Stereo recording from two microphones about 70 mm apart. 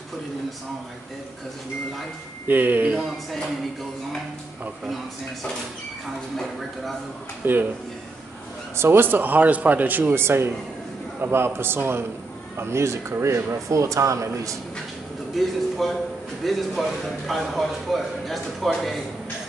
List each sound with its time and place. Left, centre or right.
2.4 s speech: right
7.4 s speech: right
8.7 s a man's voice: right
15.3 s speech: centre